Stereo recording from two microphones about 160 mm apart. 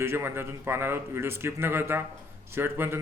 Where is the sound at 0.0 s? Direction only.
15° right (ahead or behind).